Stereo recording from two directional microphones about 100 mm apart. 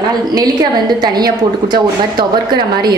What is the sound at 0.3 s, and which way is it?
A woman's voice, 45° right (ahead or behind).